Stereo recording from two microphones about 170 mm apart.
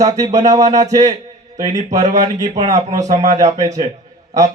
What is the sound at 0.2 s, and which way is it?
Speech, 20° right (ahead or behind).